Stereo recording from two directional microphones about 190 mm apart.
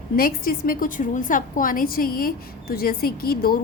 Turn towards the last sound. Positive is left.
turn(degrees=50)  # may be behind; listen again after turning